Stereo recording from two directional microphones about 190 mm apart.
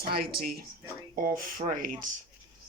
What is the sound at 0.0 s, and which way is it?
Speech, 55° right (ahead or behind).